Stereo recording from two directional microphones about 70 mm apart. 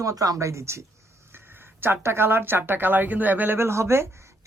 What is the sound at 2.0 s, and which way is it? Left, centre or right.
Speech, right.